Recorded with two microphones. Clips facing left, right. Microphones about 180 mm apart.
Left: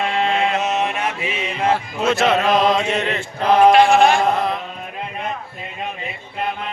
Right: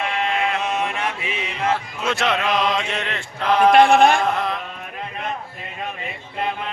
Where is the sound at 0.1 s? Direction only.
30° left (ahead or behind).